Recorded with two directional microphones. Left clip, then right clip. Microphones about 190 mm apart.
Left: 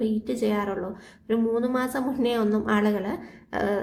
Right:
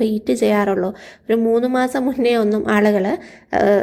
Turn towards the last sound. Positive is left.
turn(degrees=-35)  # may be behind; listen again after turning